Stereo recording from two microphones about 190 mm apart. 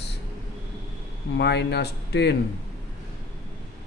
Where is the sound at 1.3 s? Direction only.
65° left (ahead or behind).